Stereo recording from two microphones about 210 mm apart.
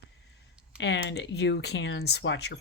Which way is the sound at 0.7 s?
55° left (ahead or behind).